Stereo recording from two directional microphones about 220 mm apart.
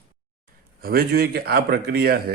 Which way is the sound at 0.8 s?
45° right (ahead or behind).